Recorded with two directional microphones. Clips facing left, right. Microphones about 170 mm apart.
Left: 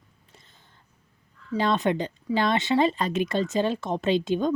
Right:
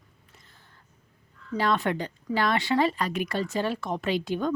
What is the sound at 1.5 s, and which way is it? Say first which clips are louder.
Speech: left 2 dB; 20° left (ahead or behind).